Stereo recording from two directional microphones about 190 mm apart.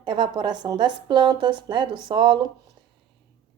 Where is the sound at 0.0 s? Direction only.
25° right (ahead or behind).